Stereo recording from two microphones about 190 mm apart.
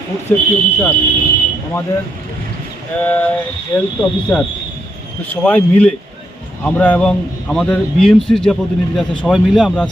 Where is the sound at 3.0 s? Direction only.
10° left (ahead or behind).